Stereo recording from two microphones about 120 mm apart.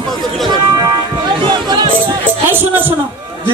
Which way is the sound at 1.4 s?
35° right (ahead or behind).